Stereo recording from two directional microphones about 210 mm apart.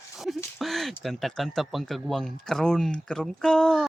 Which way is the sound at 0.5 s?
Centre (ahead or behind).